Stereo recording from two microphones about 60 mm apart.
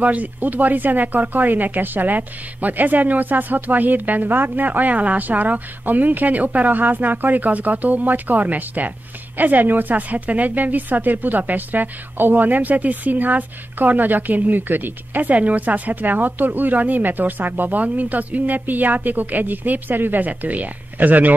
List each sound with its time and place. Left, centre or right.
0.0 s a woman's voice: right